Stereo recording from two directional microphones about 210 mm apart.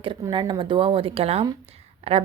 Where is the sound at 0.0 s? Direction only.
25° right (ahead or behind).